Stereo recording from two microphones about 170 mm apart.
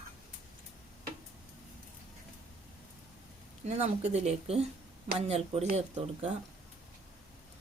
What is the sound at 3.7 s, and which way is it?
Speech, 45° right (ahead or behind).